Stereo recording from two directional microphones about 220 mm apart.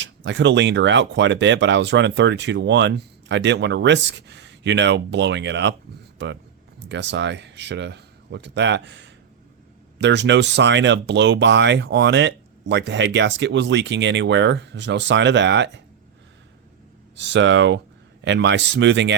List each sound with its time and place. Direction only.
0.0 s speech: 55° right (ahead or behind)
6.8 s speech: 55° right (ahead or behind)
17.2 s speech: 55° right (ahead or behind)